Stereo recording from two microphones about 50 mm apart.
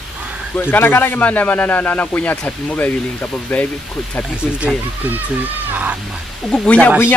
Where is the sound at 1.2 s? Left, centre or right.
Left.